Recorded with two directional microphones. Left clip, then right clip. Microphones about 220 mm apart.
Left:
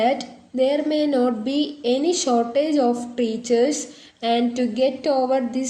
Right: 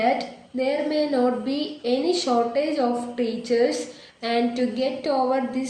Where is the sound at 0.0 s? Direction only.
50° left (ahead or behind).